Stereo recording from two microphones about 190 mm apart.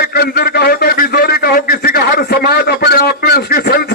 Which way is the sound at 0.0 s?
55° left (ahead or behind).